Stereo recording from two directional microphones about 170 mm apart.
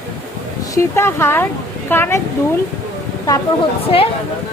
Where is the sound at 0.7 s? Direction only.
15° left (ahead or behind).